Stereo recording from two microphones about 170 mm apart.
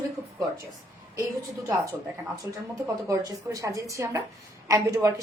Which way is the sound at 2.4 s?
20° right (ahead or behind).